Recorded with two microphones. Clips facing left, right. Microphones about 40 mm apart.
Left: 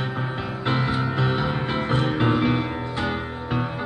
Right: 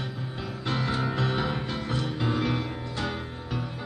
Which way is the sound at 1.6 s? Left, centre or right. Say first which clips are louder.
Left 7 dB; left.